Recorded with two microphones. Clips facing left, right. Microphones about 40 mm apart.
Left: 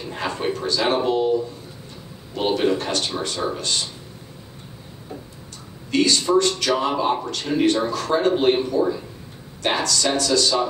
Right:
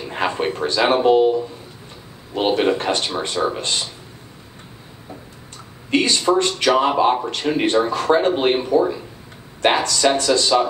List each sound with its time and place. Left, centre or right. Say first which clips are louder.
0.1 s a man's voice: right 4 dB; right
2.3 s a man's voice: right 3 dB; right
5.9 s a man's voice: right 2 dB; right